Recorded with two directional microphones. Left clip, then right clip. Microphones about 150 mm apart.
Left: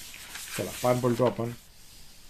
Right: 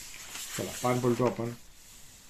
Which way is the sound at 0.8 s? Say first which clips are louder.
Left 3 dB; 35° left (ahead or behind).